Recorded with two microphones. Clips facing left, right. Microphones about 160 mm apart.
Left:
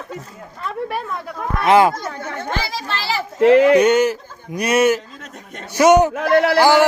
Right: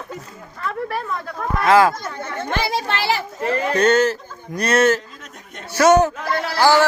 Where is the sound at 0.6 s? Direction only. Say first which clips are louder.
Even; 15° left (ahead or behind).